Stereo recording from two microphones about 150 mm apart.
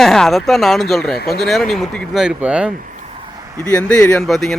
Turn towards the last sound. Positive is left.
turn(degrees=0)  # may be behind; listen again after turning